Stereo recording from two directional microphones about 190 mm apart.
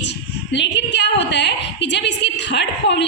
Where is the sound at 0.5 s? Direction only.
65° left (ahead or behind).